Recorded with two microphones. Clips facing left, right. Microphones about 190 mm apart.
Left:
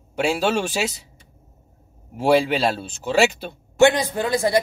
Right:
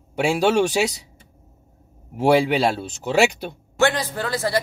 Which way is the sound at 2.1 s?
15° right (ahead or behind).